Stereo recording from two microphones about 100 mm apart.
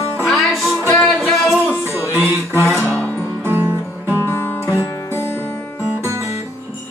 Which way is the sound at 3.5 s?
20° right (ahead or behind).